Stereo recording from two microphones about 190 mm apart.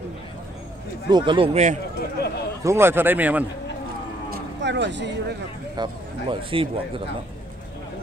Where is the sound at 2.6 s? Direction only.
15° right (ahead or behind).